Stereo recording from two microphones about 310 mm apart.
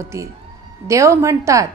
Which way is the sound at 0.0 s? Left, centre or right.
Centre.